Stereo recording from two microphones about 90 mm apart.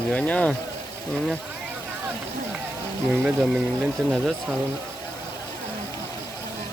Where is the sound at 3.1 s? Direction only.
15° right (ahead or behind).